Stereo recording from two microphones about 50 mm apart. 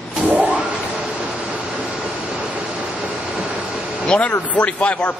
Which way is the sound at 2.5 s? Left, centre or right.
Right.